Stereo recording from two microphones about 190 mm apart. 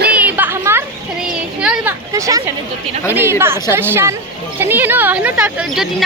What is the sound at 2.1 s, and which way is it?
Speech, 15° right (ahead or behind).